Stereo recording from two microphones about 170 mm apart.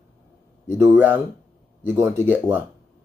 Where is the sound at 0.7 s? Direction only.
15° right (ahead or behind).